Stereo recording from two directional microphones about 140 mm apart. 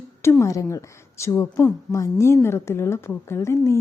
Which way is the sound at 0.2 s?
20° left (ahead or behind).